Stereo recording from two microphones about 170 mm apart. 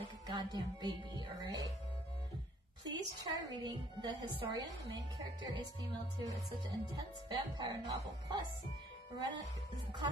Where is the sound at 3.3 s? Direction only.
20° right (ahead or behind).